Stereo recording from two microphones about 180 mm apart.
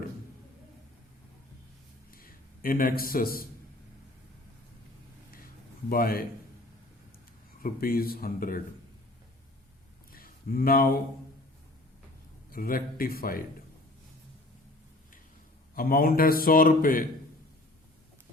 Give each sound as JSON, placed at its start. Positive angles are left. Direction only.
{"t": 2.1, "sound": "a sound", "side_deg": 55}
{"t": 5.9, "sound": "speech", "side_deg": 55}
{"t": 7.6, "sound": "a man's voice", "side_deg": 55}
{"t": 10.1, "sound": "a sound", "side_deg": 55}
{"t": 12.5, "sound": "a man's voice", "side_deg": 50}
{"t": 15.7, "sound": "a man's voice", "side_deg": 55}